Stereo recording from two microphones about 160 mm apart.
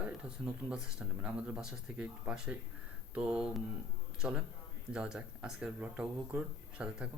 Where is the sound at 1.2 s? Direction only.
5° right (ahead or behind).